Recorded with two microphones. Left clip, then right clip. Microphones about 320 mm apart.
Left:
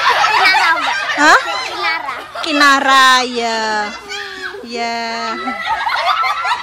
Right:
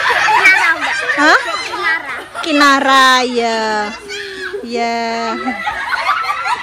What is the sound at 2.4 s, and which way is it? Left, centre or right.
A woman's voice, centre.